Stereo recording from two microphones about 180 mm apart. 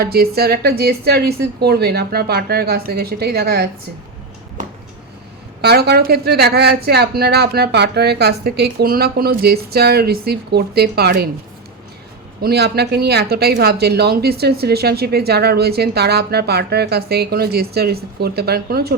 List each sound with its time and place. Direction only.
0.0 s a woman's voice: 60° right (ahead or behind)
5.6 s a woman's voice: 65° right (ahead or behind)
12.4 s a woman's voice: 65° right (ahead or behind)